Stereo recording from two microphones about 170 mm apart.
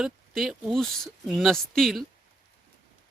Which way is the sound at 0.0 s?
Centre (ahead or behind).